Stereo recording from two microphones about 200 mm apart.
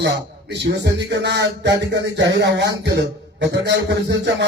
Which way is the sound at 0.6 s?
60° right (ahead or behind).